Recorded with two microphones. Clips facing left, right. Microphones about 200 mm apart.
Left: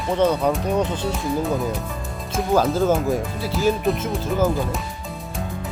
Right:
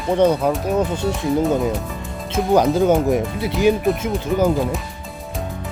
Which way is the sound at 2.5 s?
15° right (ahead or behind).